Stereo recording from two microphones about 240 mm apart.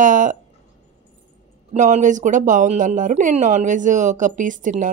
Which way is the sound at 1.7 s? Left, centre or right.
Right.